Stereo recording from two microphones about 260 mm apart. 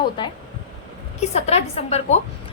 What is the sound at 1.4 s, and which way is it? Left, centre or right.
Speech, left.